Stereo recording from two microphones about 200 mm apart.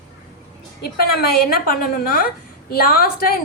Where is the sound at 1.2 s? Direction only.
50° left (ahead or behind).